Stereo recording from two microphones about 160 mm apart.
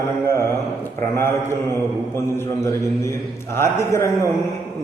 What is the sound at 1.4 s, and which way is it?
A man's voice, 15° left (ahead or behind).